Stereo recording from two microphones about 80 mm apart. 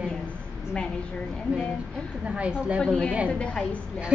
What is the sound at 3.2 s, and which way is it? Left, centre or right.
Speech, centre.